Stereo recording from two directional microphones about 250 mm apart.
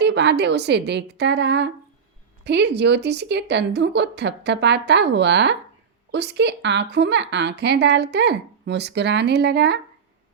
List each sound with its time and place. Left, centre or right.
0.0 s a woman's voice: right